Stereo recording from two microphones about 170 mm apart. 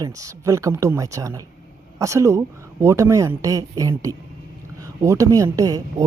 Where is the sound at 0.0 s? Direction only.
20° right (ahead or behind).